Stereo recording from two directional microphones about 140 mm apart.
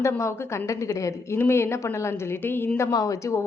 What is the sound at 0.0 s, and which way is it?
A woman's voice, 20° left (ahead or behind).